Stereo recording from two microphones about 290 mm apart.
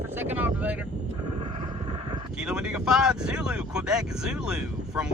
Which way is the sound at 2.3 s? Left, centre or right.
Centre.